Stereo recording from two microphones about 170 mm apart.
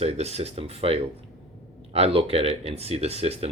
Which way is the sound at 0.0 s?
40° right (ahead or behind).